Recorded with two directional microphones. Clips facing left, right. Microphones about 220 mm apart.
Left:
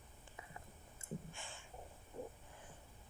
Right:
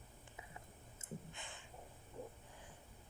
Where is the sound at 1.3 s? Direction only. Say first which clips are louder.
Left 1 dB; 20° right (ahead or behind).